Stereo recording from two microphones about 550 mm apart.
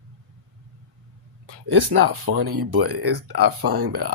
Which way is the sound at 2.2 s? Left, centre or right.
Right.